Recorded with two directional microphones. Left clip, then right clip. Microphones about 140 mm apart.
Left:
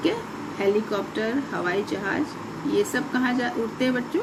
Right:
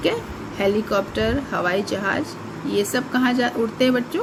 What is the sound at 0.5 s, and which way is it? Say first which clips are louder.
Speech: right 3 dB; 65° right (ahead or behind).